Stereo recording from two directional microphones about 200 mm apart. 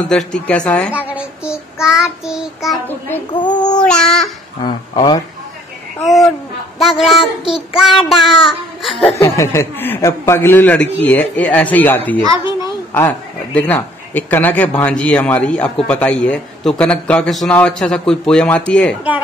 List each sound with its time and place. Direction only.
0.1 s speech: 5° left (ahead or behind)
0.9 s child singing: 5° right (ahead or behind)
2.0 s a man's voice: 5° right (ahead or behind)
3.3 s speech: 20° left (ahead or behind)
3.8 s a man's voice: 5° left (ahead or behind)
4.6 s speech: 20° left (ahead or behind)
7.0 s a man's voice: centre (ahead or behind)
9.1 s speech: 15° left (ahead or behind)
12.6 s a sound: 10° left (ahead or behind)
13.6 s a man's voice: 10° left (ahead or behind)